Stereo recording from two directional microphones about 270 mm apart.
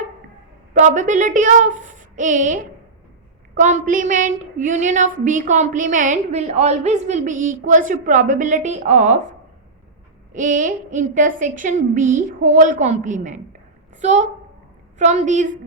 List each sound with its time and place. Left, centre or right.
0.7 s a woman's voice: right
10.3 s a woman's voice: right